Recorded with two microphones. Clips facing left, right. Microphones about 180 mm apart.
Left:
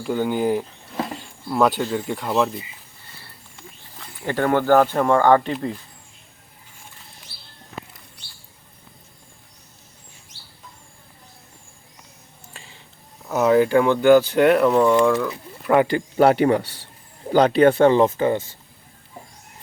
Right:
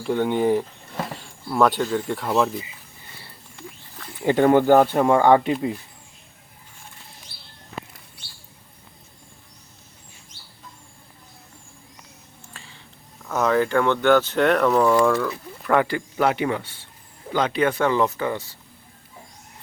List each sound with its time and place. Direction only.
0.0 s speech: 5° left (ahead or behind)
4.2 s speech: 20° right (ahead or behind)
13.2 s speech: 15° left (ahead or behind)
16.1 s a man's voice: 35° left (ahead or behind)